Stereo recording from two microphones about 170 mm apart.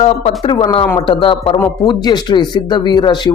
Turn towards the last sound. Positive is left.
turn(degrees=25)  # may be behind; listen again after turning